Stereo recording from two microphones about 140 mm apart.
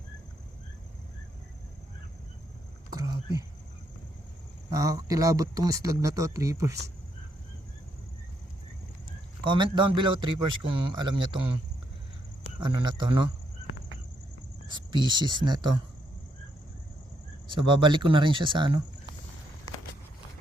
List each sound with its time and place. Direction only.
2.9 s a sound: 25° right (ahead or behind)
4.7 s speech: 25° right (ahead or behind)
9.4 s a man's voice: 35° right (ahead or behind)
12.5 s a man's voice: 30° right (ahead or behind)
14.7 s a man's voice: 30° right (ahead or behind)
17.5 s a man's voice: 35° right (ahead or behind)